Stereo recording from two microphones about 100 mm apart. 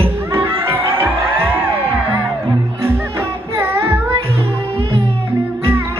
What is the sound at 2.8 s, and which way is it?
Music, 25° right (ahead or behind).